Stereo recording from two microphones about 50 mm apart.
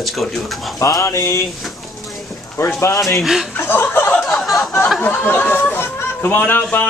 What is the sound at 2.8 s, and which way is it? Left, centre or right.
Speech, left.